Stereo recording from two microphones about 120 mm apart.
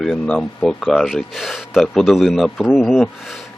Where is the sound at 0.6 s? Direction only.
Centre (ahead or behind).